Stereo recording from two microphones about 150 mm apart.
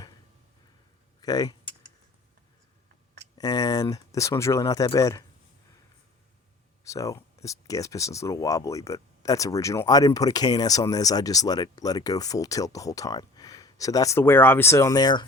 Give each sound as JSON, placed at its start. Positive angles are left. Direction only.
{"t": 1.2, "sound": "speech", "side_deg": 25}
{"t": 3.3, "sound": "speech", "side_deg": 25}
{"t": 6.8, "sound": "speech", "side_deg": 20}